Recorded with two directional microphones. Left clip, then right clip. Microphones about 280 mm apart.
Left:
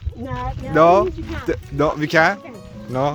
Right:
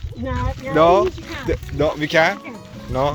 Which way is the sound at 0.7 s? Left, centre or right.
Left.